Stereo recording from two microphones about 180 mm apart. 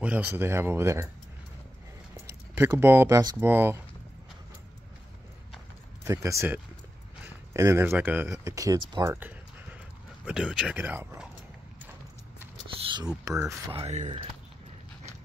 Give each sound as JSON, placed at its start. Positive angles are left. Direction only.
{"t": 0.0, "sound": "speech", "side_deg": -10}
{"t": 2.2, "sound": "speech", "side_deg": -15}
{"t": 6.0, "sound": "speech", "side_deg": -15}
{"t": 12.7, "sound": "a sound", "side_deg": -25}
{"t": 13.7, "sound": "speech", "side_deg": -35}